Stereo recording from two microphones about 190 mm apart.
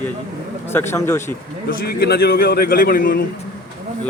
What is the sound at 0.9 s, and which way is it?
Speech, 15° left (ahead or behind).